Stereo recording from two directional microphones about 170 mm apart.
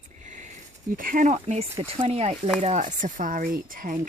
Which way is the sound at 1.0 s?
55° right (ahead or behind).